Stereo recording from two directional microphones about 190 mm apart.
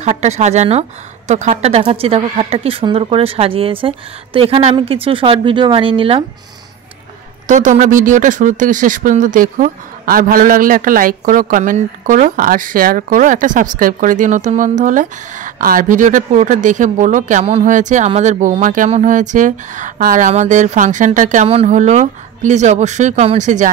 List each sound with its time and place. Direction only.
0.0 s a woman's voice: 35° right (ahead or behind)
7.4 s speech: 40° right (ahead or behind)